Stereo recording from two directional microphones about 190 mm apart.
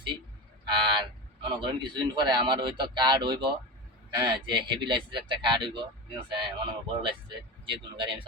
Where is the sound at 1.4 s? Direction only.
25° right (ahead or behind).